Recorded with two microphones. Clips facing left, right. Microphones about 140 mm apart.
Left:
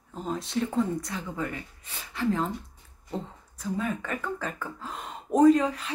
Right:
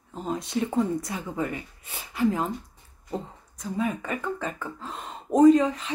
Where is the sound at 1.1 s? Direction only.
15° right (ahead or behind).